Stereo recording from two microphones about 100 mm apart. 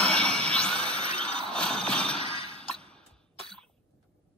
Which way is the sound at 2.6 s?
10° left (ahead or behind).